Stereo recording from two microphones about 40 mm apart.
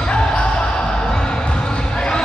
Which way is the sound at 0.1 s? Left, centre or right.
Left.